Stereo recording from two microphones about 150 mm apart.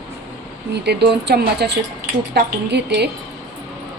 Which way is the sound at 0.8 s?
90° right.